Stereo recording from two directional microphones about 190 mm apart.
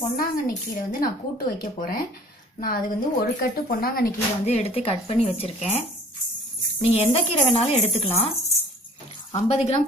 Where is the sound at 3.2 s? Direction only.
55° left (ahead or behind).